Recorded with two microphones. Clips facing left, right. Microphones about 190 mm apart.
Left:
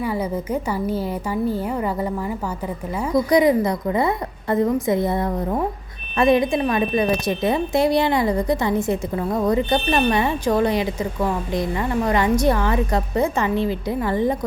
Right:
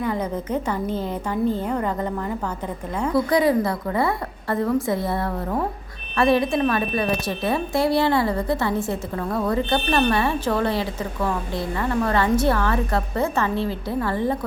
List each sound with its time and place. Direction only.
0.0 s speech: 10° left (ahead or behind)